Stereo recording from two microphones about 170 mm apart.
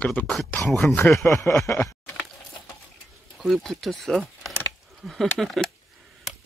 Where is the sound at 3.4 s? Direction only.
Centre (ahead or behind).